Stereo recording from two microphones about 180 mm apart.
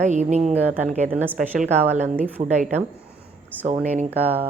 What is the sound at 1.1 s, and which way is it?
A woman's voice, 10° right (ahead or behind).